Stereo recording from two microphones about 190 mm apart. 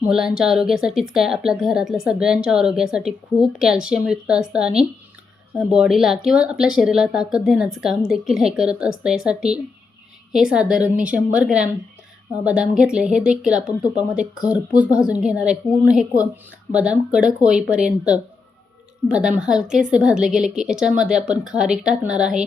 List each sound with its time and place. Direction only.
0.0 s speech: 5° right (ahead or behind)